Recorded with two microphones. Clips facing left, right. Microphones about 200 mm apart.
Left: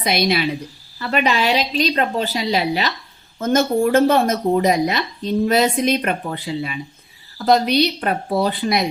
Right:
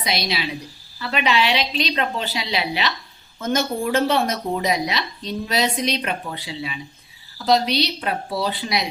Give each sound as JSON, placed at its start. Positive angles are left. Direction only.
{"t": 0.0, "sound": "speech", "side_deg": 50}
{"t": 0.9, "sound": "a woman's voice", "side_deg": 40}